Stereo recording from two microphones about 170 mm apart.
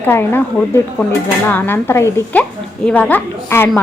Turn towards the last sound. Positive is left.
turn(degrees=15)  # may be behind; listen again after turning